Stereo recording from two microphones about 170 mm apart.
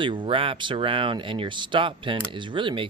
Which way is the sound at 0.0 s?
30° right (ahead or behind).